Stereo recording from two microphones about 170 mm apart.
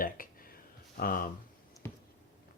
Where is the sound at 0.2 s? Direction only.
55° left (ahead or behind).